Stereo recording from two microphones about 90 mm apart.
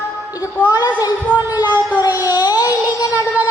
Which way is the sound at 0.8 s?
50° left (ahead or behind).